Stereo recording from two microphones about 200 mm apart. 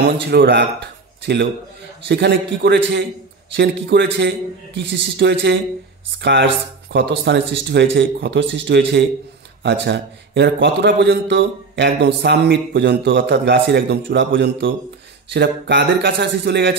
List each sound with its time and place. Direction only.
0.0 s a man's voice: 55° right (ahead or behind)